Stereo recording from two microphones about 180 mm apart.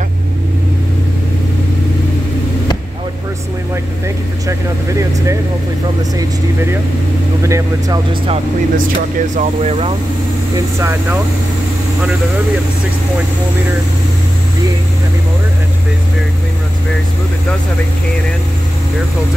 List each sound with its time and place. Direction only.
4.5 s vehicle: 15° right (ahead or behind)
6.1 s speech: 15° right (ahead or behind)
8.7 s speech: 45° right (ahead or behind)
10.8 s speech: 15° right (ahead or behind)